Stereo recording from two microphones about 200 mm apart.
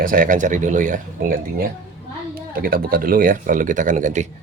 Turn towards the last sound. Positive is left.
turn(degrees=-40)  # may be behind; listen again after turning